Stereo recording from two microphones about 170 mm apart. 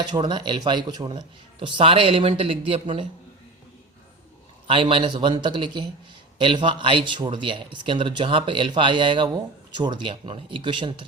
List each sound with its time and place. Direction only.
0.0 s speech: 25° right (ahead or behind)
4.7 s speech: 30° right (ahead or behind)